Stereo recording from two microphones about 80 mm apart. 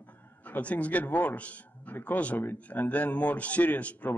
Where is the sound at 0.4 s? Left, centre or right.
Centre.